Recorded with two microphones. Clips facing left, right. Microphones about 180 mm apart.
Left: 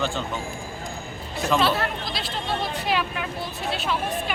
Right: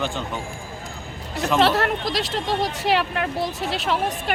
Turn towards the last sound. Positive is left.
turn(degrees=-80)